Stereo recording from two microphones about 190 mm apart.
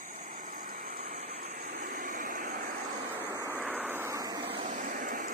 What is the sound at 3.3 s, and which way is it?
Vehicle, 15° right (ahead or behind).